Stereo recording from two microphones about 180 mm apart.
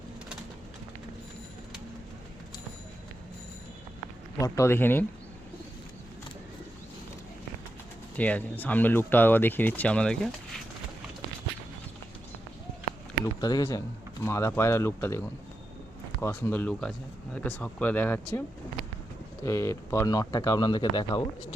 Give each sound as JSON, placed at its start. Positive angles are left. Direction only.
{"t": 4.4, "sound": "speech", "side_deg": 20}
{"t": 8.1, "sound": "speech", "side_deg": 10}
{"t": 13.4, "sound": "speech", "side_deg": 20}
{"t": 16.2, "sound": "speech", "side_deg": 10}
{"t": 19.5, "sound": "speech", "side_deg": 15}